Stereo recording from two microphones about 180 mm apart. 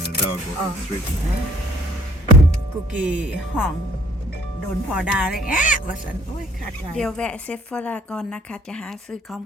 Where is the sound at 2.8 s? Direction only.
5° right (ahead or behind).